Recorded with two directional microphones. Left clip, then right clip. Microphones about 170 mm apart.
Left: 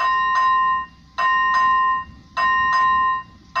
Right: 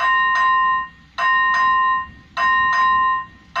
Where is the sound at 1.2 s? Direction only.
45° left (ahead or behind).